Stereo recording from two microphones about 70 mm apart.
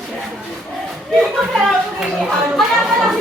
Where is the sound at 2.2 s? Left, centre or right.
Centre.